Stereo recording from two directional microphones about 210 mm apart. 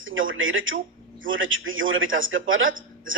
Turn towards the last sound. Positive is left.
turn(degrees=-70)  # may be behind; listen again after turning